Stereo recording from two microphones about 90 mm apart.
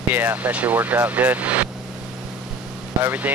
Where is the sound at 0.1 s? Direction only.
20° right (ahead or behind).